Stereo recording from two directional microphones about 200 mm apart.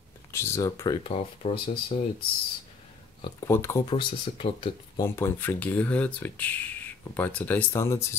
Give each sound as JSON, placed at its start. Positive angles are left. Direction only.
{"t": 0.3, "sound": "speech", "side_deg": 15}
{"t": 1.1, "sound": "speech", "side_deg": 30}
{"t": 3.3, "sound": "speech", "side_deg": 15}
{"t": 3.8, "sound": "speech", "side_deg": 25}